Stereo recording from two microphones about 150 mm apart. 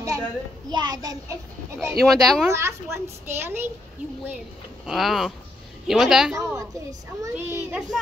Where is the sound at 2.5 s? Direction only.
20° right (ahead or behind).